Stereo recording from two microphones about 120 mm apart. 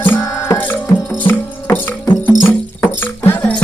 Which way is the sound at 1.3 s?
15° left (ahead or behind).